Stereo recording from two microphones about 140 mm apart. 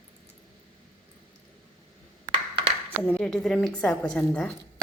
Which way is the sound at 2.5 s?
40° right (ahead or behind).